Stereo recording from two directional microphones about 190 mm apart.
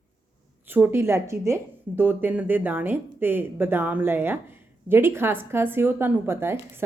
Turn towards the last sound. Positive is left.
turn(degrees=-15)  # may be behind; listen again after turning